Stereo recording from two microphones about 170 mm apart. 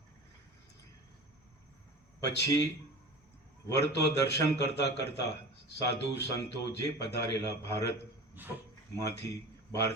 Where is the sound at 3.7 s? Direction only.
75° left (ahead or behind).